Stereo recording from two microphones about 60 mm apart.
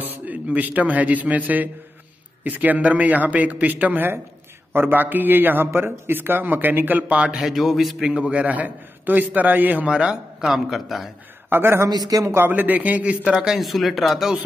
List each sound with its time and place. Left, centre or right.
0.0 s a man's voice: right
7.2 s speech: centre
8.1 s a man's voice: centre
9.8 s a man's voice: centre
11.4 s speech: right
11.8 s speech: right
12.3 s a man's voice: right
13.6 s speech: centre